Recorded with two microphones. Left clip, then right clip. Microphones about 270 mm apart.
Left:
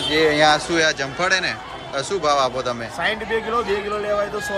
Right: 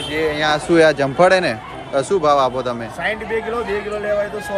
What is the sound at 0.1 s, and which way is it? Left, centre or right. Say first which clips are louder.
Speech: left 3 dB; left.